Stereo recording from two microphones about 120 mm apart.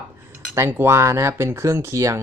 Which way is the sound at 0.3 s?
20° right (ahead or behind).